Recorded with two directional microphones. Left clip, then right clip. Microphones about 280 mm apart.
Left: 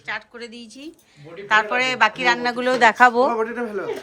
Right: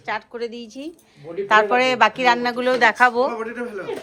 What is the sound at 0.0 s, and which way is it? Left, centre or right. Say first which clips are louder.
Speech: right 4 dB; centre.